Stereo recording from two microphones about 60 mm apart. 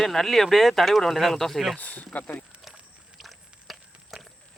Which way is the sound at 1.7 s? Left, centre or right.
Left.